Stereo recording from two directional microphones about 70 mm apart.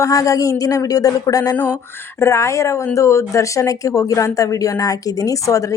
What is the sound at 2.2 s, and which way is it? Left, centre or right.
Speech, left.